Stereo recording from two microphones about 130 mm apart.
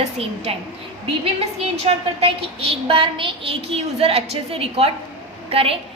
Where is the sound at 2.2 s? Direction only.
45° right (ahead or behind).